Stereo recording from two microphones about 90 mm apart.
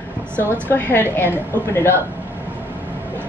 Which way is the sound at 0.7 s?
25° left (ahead or behind).